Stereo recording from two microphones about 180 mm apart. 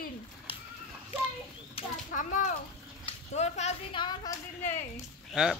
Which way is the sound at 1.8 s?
30° left (ahead or behind).